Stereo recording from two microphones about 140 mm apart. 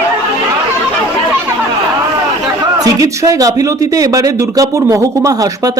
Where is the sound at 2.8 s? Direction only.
25° right (ahead or behind).